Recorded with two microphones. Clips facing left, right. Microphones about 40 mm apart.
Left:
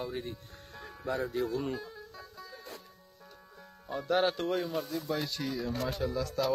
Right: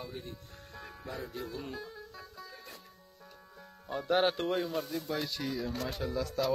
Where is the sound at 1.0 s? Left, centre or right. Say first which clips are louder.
Left 9 dB; left.